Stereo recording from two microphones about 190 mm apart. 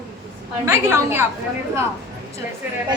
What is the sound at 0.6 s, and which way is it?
Speech, 15° right (ahead or behind).